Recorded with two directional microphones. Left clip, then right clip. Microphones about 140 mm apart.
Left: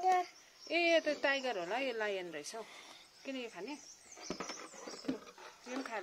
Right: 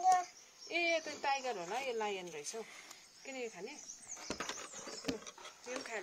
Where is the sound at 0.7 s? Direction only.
45° left (ahead or behind).